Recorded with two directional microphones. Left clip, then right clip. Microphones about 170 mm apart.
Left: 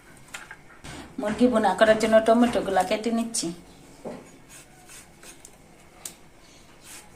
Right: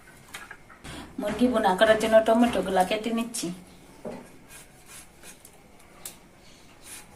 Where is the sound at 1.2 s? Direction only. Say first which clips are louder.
Left 2 dB; 30° left (ahead or behind).